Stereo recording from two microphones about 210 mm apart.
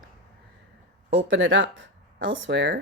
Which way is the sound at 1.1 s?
65° right (ahead or behind).